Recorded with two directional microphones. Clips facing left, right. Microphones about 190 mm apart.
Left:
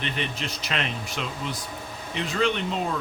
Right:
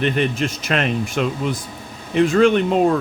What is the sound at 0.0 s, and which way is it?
Speech, 50° right (ahead or behind).